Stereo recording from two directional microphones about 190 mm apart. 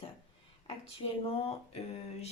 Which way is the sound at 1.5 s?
35° left (ahead or behind).